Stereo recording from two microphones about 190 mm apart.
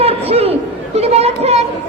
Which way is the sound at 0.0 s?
30° right (ahead or behind).